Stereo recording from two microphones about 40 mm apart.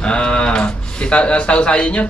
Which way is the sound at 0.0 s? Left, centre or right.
Left.